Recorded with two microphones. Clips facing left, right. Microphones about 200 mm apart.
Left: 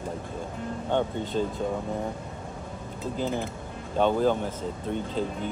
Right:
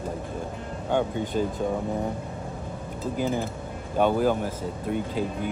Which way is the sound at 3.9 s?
10° right (ahead or behind).